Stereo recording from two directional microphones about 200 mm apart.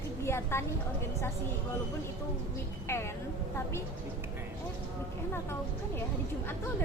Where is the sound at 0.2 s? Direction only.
15° left (ahead or behind).